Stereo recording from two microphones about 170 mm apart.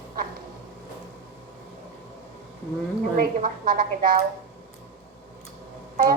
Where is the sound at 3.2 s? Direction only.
55° right (ahead or behind).